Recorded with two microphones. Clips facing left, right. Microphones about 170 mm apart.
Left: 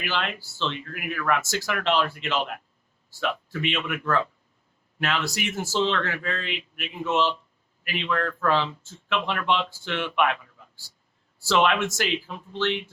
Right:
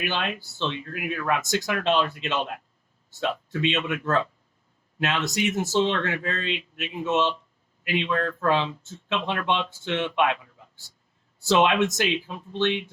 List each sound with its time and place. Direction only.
0.0 s speech: 20° right (ahead or behind)
11.3 s speech: 20° right (ahead or behind)